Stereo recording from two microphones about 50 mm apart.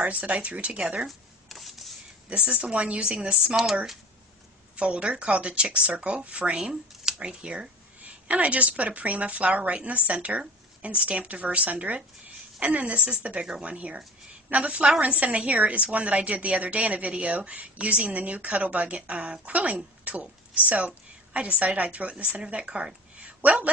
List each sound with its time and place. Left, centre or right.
0.0 s a woman's voice: right
1.0 s a sound: centre
2.2 s a woman's voice: right
4.7 s a woman's voice: right